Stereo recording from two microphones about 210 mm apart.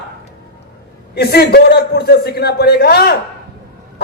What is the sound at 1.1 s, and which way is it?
Speech, 50° left (ahead or behind).